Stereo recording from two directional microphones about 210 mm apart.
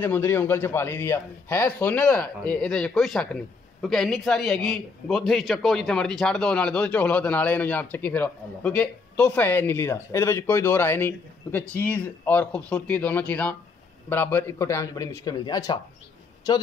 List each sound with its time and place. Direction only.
0.0 s a man's voice: 10° left (ahead or behind)